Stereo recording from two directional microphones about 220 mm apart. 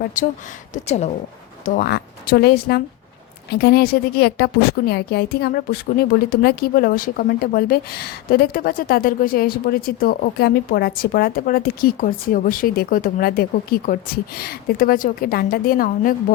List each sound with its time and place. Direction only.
0.2 s a woman's voice: 35° left (ahead or behind)